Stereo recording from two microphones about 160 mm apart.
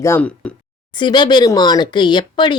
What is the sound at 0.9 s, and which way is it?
Speech, 30° left (ahead or behind).